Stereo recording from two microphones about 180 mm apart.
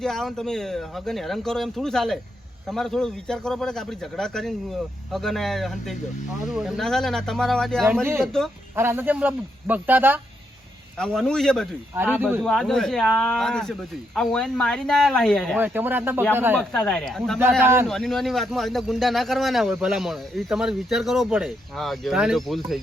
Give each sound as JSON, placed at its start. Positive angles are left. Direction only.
{"t": 0.0, "sound": "a man's voice", "side_deg": 0}
{"t": 8.7, "sound": "speech", "side_deg": -10}
{"t": 10.9, "sound": "a man's voice", "side_deg": 5}
{"t": 15.5, "sound": "speech", "side_deg": -10}
{"t": 16.6, "sound": "a man's voice", "side_deg": 5}
{"t": 17.6, "sound": "speech", "side_deg": -10}
{"t": 17.8, "sound": "a man's voice", "side_deg": 0}